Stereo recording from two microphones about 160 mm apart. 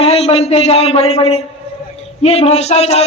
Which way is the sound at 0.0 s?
40° left (ahead or behind).